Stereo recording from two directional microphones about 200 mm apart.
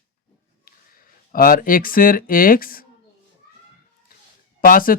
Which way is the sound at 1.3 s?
45° left (ahead or behind).